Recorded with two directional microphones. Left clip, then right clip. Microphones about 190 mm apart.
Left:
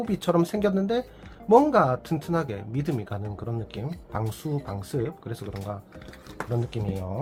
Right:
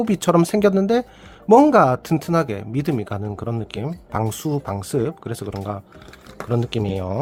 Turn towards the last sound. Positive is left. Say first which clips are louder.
# right 9 dB
turn(degrees=-60)  # may be behind; listen again after turning